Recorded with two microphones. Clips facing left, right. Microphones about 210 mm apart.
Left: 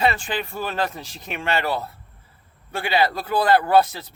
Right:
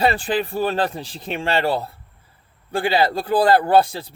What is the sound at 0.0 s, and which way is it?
Speech, 35° right (ahead or behind).